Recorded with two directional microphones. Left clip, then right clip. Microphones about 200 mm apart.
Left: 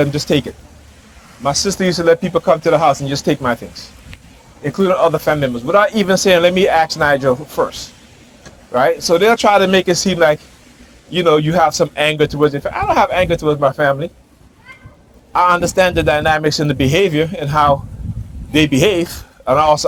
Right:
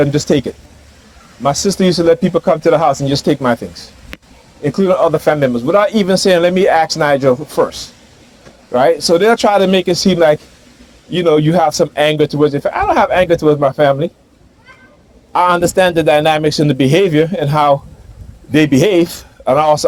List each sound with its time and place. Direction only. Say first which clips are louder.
0.0 s a man's voice: right 3 dB; 60° right (ahead or behind)
15.3 s a man's voice: right 1 dB; 60° right (ahead or behind)